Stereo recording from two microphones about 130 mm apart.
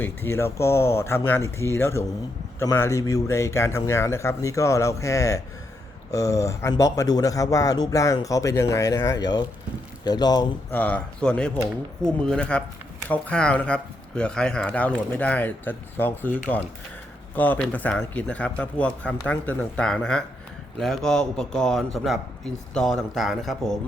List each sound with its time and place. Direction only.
0.0 s speech: 20° left (ahead or behind)
10.7 s a man's voice: 10° left (ahead or behind)